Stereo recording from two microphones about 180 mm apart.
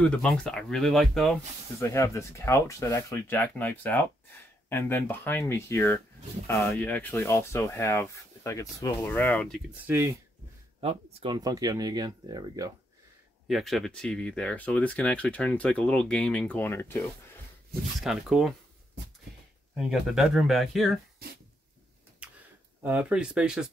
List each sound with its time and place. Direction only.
0.0 s speech: 5° left (ahead or behind)
1.8 s speech: 15° left (ahead or behind)
9.8 s speech: 15° right (ahead or behind)
10.8 s speech: 30° right (ahead or behind)
11.3 s speech: 20° right (ahead or behind)
13.5 s speech: centre (ahead or behind)
18.0 s speech: centre (ahead or behind)
19.8 s speech: centre (ahead or behind)
22.2 s a sound: 5° right (ahead or behind)
22.8 s speech: 10° right (ahead or behind)